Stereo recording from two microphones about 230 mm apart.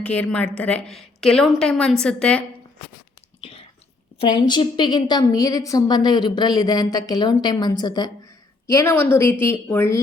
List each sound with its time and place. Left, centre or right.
0.0 s a woman's voice: centre
3.4 s chewing: left
4.2 s a woman's voice: left